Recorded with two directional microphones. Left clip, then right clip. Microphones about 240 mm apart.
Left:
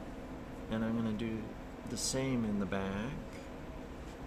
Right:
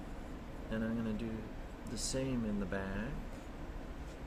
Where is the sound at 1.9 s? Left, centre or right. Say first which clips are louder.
Left 3 dB; left.